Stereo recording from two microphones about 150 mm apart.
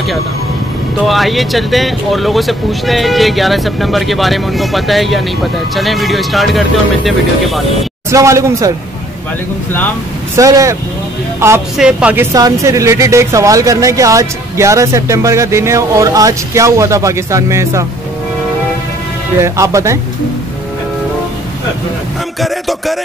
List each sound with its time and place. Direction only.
1.0 s speech: centre (ahead or behind)
8.1 s speech: 20° right (ahead or behind)
10.3 s speech: 20° right (ahead or behind)
11.3 s music: 20° right (ahead or behind)
11.7 s speech: 5° right (ahead or behind)
19.4 s speech: 20° right (ahead or behind)
22.4 s music: centre (ahead or behind)